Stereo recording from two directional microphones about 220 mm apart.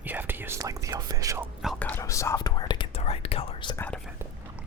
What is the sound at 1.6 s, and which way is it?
Whispering, 5° left (ahead or behind).